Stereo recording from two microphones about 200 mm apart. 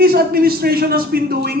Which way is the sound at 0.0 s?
50° right (ahead or behind).